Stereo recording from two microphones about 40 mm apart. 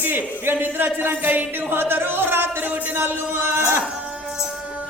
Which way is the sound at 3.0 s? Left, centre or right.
Right.